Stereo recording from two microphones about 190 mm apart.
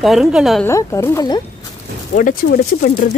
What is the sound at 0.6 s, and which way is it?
Speech, 15° left (ahead or behind).